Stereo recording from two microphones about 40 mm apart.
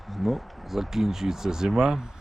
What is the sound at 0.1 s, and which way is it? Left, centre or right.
Speech, centre.